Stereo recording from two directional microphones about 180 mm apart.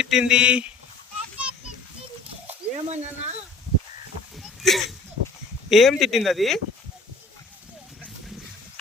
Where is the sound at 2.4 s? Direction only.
40° right (ahead or behind).